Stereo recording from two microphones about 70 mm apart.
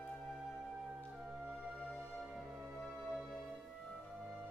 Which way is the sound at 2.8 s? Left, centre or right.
Centre.